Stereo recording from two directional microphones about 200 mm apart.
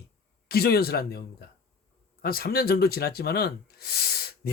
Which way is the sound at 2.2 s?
50° left (ahead or behind).